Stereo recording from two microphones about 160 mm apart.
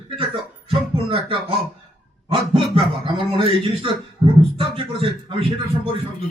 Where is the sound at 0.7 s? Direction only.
35° right (ahead or behind).